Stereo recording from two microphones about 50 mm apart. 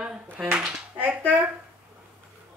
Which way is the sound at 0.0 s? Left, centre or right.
Centre.